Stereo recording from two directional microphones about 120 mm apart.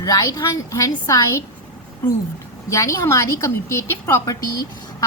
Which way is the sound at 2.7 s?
25° left (ahead or behind).